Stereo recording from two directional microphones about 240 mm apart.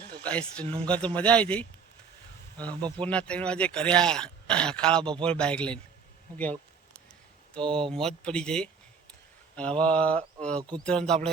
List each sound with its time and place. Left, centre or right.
0.2 s speech: centre
10.6 s speech: centre
10.8 s speech: centre